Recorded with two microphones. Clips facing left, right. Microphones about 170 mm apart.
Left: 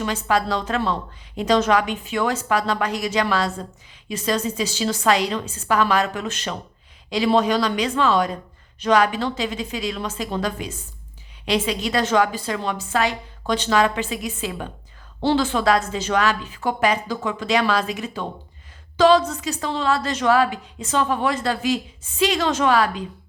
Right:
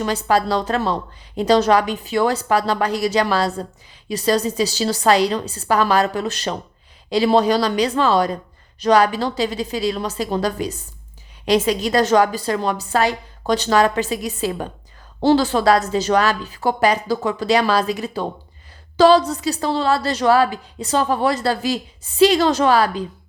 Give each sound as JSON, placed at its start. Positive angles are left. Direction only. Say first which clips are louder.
{"t": 0.0, "sound": "a woman's voice", "louder": "right 3 dB", "side_deg": -35}